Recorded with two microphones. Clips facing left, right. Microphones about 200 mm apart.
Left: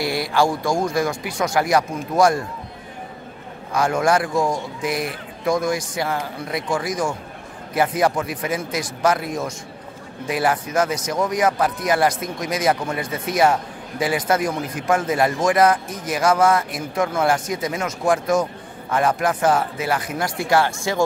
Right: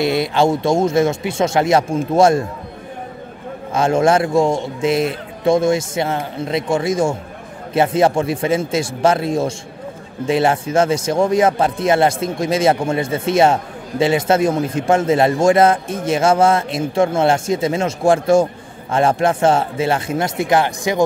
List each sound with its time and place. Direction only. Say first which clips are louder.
0.0 s speech: right 4 dB; 20° right (ahead or behind)
3.7 s speech: right 4 dB; 25° right (ahead or behind)